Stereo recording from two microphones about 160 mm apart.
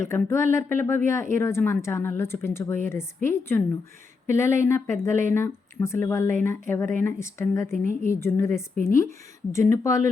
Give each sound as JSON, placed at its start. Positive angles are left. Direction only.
{"t": 0.0, "sound": "a woman's voice", "side_deg": 15}